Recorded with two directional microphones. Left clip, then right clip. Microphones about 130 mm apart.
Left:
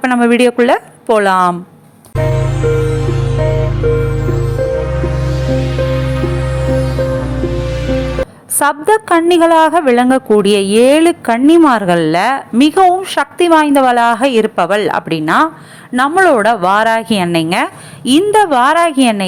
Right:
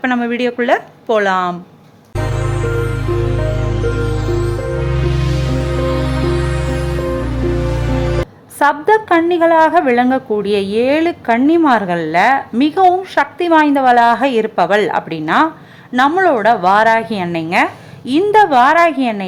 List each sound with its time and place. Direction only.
0.0 s a woman's voice: 35° left (ahead or behind)
2.1 s music: centre (ahead or behind)
8.5 s a woman's voice: 35° left (ahead or behind)